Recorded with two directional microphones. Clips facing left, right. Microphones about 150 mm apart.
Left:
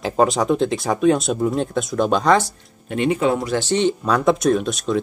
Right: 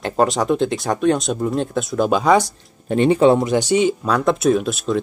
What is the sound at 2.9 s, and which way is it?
Speech, 35° right (ahead or behind).